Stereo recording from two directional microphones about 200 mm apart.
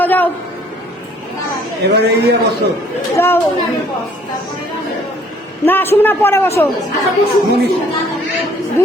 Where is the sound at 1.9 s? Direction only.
55° right (ahead or behind).